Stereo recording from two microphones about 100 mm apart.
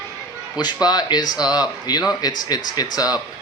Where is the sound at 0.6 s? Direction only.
45° left (ahead or behind).